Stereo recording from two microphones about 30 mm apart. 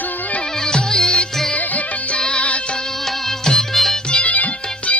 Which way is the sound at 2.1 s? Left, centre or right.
Left.